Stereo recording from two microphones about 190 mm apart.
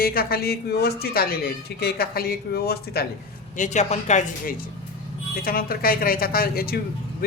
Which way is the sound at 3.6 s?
40° left (ahead or behind).